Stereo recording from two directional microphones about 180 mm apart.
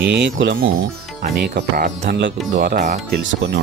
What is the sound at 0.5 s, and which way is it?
Speech, 55° right (ahead or behind).